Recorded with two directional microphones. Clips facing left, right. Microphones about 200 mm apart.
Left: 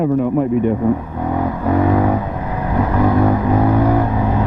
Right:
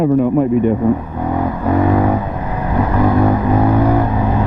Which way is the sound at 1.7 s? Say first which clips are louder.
Right 1 dB; 20° right (ahead or behind).